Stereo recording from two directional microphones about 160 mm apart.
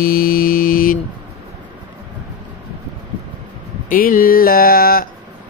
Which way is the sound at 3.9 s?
60° left (ahead or behind).